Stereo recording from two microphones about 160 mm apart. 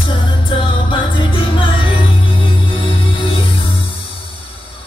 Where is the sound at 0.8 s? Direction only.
30° left (ahead or behind).